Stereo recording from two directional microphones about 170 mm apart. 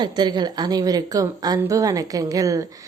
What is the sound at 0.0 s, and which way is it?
A woman's voice, 25° right (ahead or behind).